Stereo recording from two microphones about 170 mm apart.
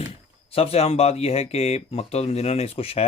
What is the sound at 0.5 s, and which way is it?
Speech, 35° left (ahead or behind).